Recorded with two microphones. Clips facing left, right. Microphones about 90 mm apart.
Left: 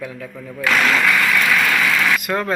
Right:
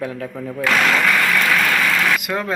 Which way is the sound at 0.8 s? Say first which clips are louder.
Even; 10° right (ahead or behind).